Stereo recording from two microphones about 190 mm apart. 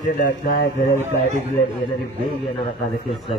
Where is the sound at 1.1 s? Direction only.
40° left (ahead or behind).